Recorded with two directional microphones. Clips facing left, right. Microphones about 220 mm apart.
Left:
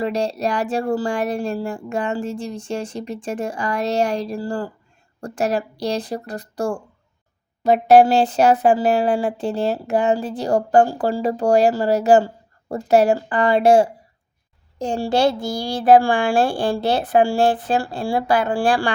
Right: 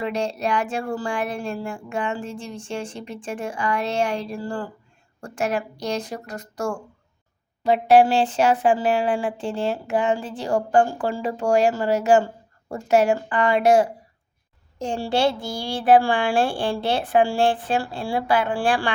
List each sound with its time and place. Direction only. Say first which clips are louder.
0.0 s speech: left 3 dB; 35° left (ahead or behind)
14.8 s speech: left 3 dB; 40° left (ahead or behind)